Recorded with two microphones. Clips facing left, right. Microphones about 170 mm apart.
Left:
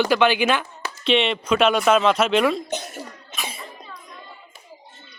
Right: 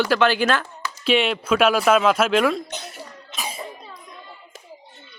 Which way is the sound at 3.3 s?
35° right (ahead or behind).